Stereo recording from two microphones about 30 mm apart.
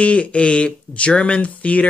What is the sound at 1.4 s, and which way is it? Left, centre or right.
Speech, left.